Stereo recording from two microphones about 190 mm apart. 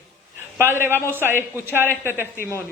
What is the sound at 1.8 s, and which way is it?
Speech, 10° left (ahead or behind).